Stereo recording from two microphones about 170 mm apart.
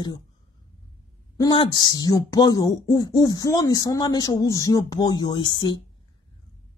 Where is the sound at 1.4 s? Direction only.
30° left (ahead or behind).